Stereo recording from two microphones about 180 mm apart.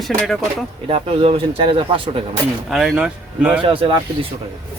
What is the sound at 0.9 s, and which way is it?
Speech, 30° right (ahead or behind).